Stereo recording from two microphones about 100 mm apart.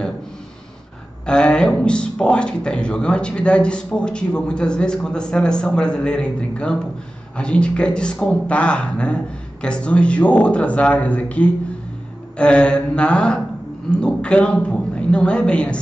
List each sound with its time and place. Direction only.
1.2 s a man's voice: 10° left (ahead or behind)